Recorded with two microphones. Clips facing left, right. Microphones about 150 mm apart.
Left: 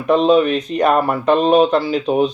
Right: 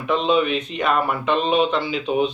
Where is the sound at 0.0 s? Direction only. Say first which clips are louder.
Left 6 dB; 40° left (ahead or behind).